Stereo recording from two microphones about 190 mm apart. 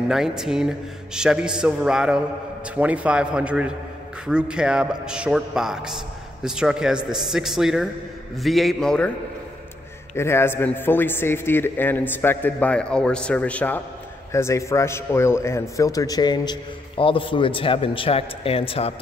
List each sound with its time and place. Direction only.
0.1 s a man's voice: centre (ahead or behind)
10.1 s a man's voice: 15° left (ahead or behind); by 18.9 s 30° left (ahead or behind)